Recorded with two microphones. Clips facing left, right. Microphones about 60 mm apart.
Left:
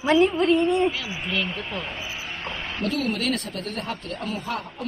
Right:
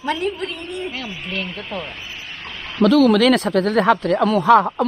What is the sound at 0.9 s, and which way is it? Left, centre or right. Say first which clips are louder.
Speech: even; centre.